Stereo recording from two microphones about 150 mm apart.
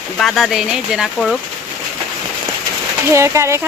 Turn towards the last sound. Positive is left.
turn(degrees=-20)  # may be behind; listen again after turning